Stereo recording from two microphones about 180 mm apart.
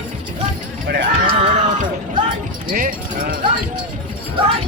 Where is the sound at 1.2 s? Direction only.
45° right (ahead or behind).